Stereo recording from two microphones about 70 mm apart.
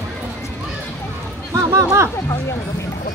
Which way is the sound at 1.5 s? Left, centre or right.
Right.